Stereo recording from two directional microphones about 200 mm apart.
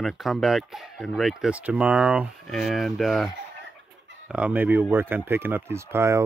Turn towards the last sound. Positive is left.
turn(degrees=-15)  # may be behind; listen again after turning